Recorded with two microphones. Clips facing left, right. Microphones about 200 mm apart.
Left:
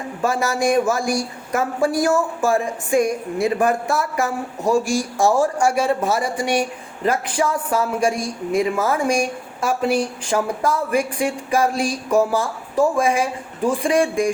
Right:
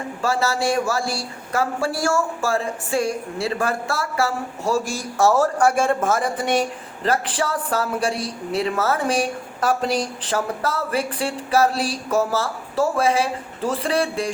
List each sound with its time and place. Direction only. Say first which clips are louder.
0.2 s a man's voice: left 2 dB; 15° left (ahead or behind)